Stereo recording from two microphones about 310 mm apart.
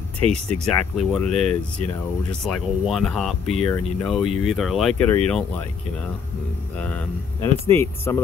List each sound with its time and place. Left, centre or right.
0.2 s speech: centre
0.7 s speech: centre
6.8 s speech: centre